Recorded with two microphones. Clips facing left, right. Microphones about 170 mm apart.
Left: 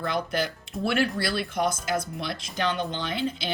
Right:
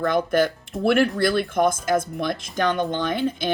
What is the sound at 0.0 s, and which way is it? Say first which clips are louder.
Speech: right 8 dB; 50° right (ahead or behind).